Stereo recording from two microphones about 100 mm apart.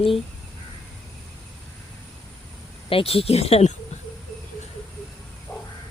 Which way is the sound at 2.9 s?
70° left (ahead or behind).